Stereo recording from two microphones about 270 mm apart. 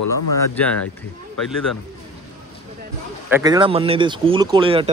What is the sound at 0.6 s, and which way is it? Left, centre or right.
Speech, centre.